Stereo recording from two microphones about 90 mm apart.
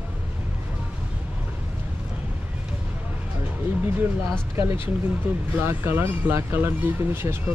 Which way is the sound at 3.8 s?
25° right (ahead or behind).